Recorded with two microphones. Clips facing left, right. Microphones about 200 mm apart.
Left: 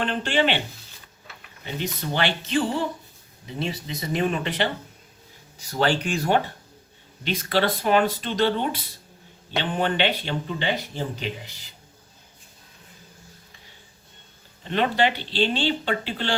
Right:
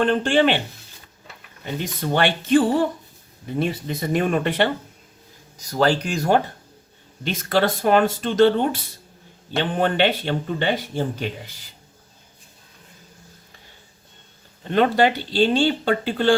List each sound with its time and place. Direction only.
0.0 s speech: 50° right (ahead or behind)
1.6 s speech: 50° right (ahead or behind)
5.5 s speech: 40° right (ahead or behind)
14.7 s speech: 45° right (ahead or behind)